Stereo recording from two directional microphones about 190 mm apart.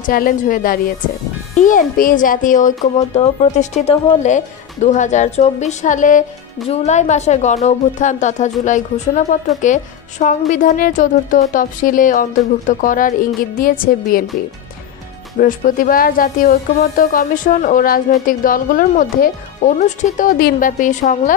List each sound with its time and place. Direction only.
0.0 s a child's voice: 45° left (ahead or behind)
15.3 s speech: 45° left (ahead or behind)